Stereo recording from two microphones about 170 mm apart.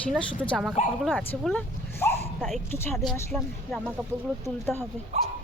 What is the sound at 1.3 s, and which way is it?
Dog, 10° left (ahead or behind).